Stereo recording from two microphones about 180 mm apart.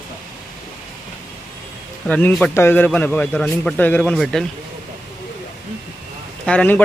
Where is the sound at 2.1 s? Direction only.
10° left (ahead or behind).